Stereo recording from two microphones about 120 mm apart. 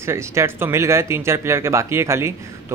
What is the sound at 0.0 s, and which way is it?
Speech, 25° right (ahead or behind).